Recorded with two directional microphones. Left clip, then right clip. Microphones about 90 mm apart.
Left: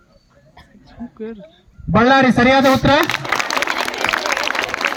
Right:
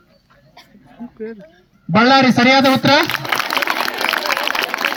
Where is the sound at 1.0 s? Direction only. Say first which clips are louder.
Left 1 dB; centre (ahead or behind).